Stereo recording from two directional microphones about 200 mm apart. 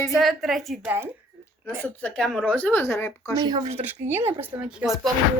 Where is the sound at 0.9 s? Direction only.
10° right (ahead or behind).